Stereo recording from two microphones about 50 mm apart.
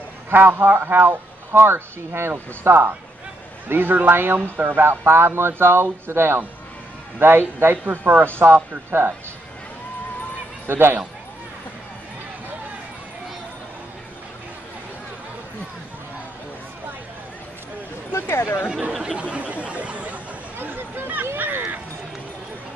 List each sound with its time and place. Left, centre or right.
0.3 s speech: right
10.7 s speech: right
18.3 s speech: left
18.7 s speech: right
19.0 s a sound: right
20.5 s a sound: right